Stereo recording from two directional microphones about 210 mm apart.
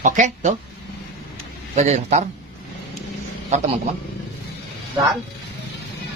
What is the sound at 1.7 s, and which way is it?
Speech, 35° right (ahead or behind).